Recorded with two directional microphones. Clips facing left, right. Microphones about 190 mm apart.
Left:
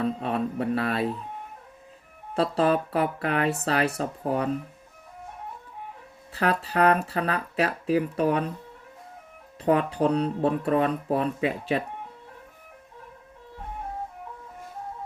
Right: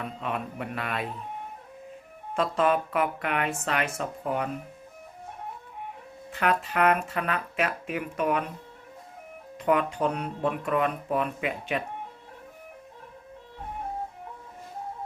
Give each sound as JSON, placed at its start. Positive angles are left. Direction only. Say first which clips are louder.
{"t": 0.0, "sound": "speech", "louder": "left 6 dB", "side_deg": 35}
{"t": 2.3, "sound": "speech", "louder": "left 2 dB", "side_deg": 35}
{"t": 6.3, "sound": "speech", "louder": "left 1 dB", "side_deg": 35}
{"t": 9.6, "sound": "speech", "louder": "left 2 dB", "side_deg": 35}